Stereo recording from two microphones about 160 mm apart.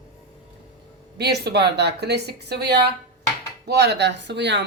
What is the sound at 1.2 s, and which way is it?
Speech, 90° right.